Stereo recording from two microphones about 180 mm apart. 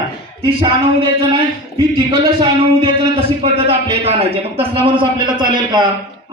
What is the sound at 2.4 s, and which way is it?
A man's voice, 30° right (ahead or behind).